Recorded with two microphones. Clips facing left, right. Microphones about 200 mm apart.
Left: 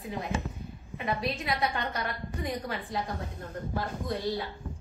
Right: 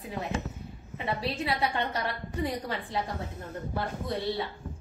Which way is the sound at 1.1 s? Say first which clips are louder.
Right 2 dB; 30° right (ahead or behind).